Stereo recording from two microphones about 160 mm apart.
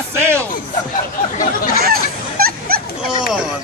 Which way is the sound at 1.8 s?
70° right (ahead or behind).